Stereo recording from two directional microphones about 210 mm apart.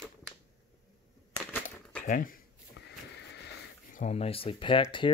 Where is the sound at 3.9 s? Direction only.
30° left (ahead or behind).